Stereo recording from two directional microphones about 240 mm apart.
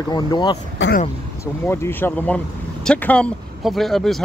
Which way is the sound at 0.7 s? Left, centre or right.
Left.